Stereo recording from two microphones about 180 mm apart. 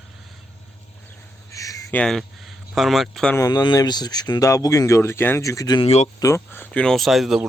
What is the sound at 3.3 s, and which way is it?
A man's voice, 20° left (ahead or behind).